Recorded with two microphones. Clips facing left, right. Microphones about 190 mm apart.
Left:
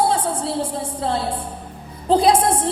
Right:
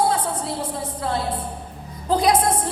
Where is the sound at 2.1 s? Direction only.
30° left (ahead or behind).